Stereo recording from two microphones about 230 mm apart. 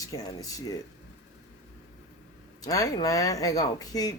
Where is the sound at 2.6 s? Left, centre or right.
Centre.